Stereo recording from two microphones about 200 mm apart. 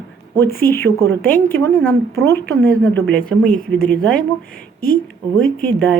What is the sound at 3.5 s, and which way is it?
Speech, 45° left (ahead or behind).